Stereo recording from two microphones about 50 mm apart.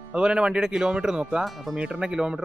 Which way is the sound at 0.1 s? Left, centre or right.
Centre.